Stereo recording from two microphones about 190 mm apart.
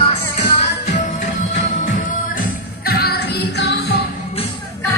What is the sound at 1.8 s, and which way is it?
Music, 45° left (ahead or behind).